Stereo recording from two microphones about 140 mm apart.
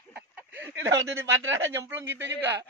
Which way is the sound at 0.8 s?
20° right (ahead or behind).